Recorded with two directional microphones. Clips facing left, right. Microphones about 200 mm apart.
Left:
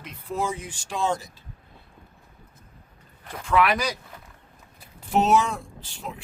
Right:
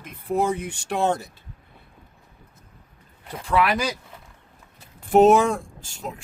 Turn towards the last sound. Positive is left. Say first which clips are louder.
# right 5 dB
turn(degrees=-45)  # may be behind; listen again after turning